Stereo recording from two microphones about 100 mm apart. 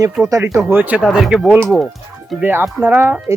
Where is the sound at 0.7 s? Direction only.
15° right (ahead or behind).